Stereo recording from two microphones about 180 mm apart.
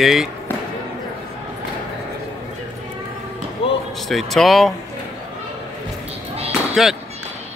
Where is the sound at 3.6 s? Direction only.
30° left (ahead or behind).